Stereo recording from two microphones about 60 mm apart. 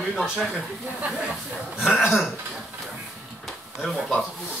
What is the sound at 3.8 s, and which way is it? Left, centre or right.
Speech, centre.